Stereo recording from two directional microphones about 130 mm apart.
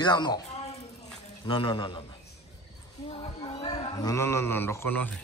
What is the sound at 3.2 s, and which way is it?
Speech, 40° left (ahead or behind).